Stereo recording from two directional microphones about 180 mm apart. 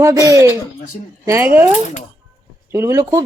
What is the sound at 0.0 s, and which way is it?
Speech, 20° right (ahead or behind).